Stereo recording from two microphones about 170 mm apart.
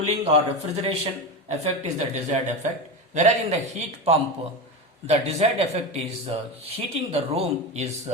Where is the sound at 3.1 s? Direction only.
40° right (ahead or behind).